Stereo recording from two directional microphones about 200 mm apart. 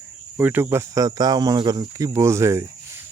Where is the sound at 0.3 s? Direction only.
10° right (ahead or behind).